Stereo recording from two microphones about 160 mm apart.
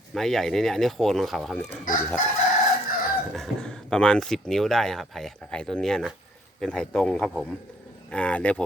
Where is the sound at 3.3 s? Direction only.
5° left (ahead or behind).